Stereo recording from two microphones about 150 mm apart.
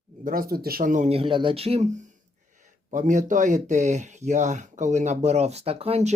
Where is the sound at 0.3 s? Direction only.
80° right; by 1.1 s 60° right (ahead or behind).